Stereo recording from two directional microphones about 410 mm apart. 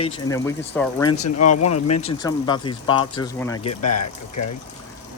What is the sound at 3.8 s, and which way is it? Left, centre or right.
Speech, left.